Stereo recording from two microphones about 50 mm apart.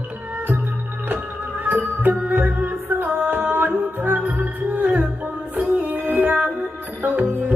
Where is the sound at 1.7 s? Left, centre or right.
Right.